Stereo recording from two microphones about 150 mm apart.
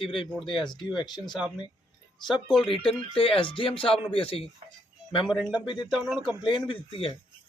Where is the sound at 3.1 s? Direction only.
35° left (ahead or behind).